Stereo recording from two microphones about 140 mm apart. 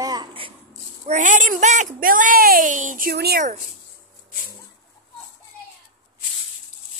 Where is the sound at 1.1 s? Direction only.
65° right (ahead or behind); by 3.5 s 90° right.